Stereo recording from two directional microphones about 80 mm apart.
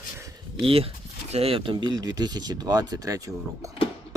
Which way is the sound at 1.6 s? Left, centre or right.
Right.